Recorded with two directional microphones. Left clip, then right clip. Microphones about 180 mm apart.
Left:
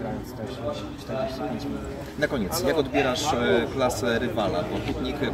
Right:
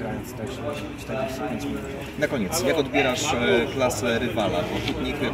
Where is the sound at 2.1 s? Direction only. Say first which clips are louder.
Right 1 dB; centre (ahead or behind).